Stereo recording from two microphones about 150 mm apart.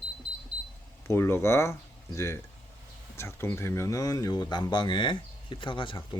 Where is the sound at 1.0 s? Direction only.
15° left (ahead or behind).